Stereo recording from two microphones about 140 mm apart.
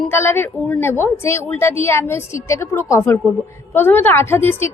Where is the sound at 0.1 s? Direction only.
15° left (ahead or behind).